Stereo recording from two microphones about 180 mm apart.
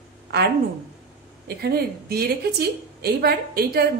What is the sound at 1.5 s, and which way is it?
A woman's voice, 60° right (ahead or behind).